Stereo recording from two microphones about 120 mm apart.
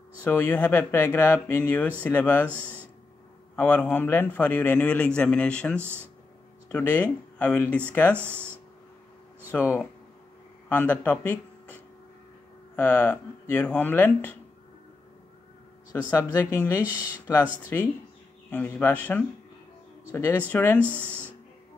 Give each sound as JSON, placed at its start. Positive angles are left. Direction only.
{"t": 0.2, "sound": "speech", "side_deg": 15}
{"t": 2.4, "sound": "speech", "side_deg": -15}
{"t": 3.5, "sound": "speech", "side_deg": 15}
{"t": 5.8, "sound": "speech", "side_deg": -20}
{"t": 6.7, "sound": "speech", "side_deg": 15}
{"t": 8.2, "sound": "speech", "side_deg": -15}
{"t": 9.5, "sound": "speech", "side_deg": 15}
{"t": 15.9, "sound": "speech", "side_deg": 25}
{"t": 17.7, "sound": "speech", "side_deg": 20}
{"t": 20.8, "sound": "speech", "side_deg": -15}